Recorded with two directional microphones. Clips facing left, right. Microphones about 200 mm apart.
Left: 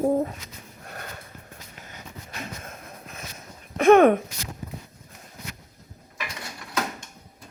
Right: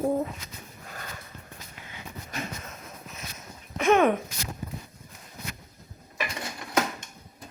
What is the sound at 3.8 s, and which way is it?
Speech, 55° left (ahead or behind).